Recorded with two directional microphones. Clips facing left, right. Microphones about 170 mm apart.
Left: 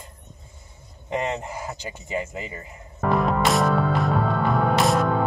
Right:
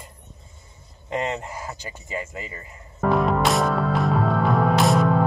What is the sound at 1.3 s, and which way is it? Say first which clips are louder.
Speech: left 1 dB; 20° left (ahead or behind).